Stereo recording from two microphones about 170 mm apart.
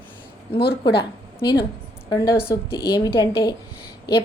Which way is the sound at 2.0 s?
15° left (ahead or behind).